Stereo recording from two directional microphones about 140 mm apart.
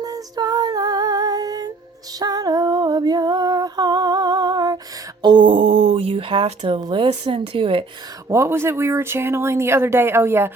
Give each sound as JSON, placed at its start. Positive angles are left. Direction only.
{"t": 0.0, "sound": "music", "side_deg": -25}
{"t": 2.1, "sound": "female singing", "side_deg": -30}
{"t": 5.2, "sound": "speech", "side_deg": -35}
{"t": 8.3, "sound": "speech", "side_deg": -20}